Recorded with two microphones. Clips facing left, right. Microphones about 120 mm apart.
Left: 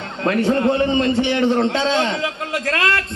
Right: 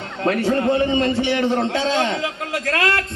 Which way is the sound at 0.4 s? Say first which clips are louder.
Left 2 dB; 25° left (ahead or behind).